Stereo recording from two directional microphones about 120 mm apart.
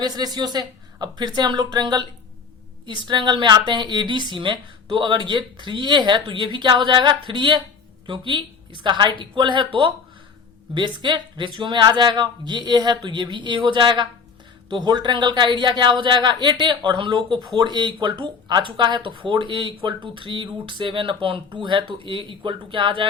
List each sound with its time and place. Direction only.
0.0 s speech: 35° right (ahead or behind)
10.8 s speech: 40° right (ahead or behind)